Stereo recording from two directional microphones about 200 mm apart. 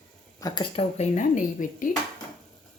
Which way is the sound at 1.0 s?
40° left (ahead or behind).